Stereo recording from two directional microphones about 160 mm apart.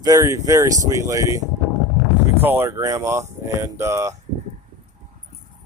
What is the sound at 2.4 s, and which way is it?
Speech, 15° right (ahead or behind).